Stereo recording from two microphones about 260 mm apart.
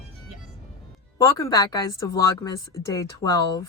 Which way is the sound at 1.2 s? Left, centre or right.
Centre.